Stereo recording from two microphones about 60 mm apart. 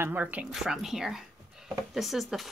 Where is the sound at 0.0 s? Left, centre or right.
Right.